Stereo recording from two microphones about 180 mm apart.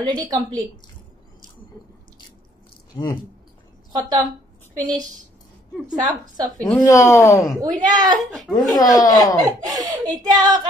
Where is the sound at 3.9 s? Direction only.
25° right (ahead or behind).